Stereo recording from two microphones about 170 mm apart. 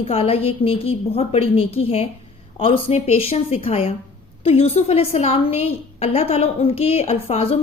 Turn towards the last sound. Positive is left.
turn(degrees=35)  # may be behind; listen again after turning